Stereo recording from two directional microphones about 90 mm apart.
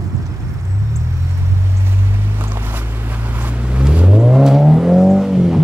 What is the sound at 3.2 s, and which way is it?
Vehicle, 20° right (ahead or behind).